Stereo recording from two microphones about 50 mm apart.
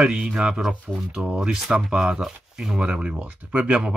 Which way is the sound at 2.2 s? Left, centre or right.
Centre.